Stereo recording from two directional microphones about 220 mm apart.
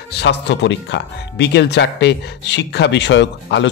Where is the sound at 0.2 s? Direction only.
50° left (ahead or behind).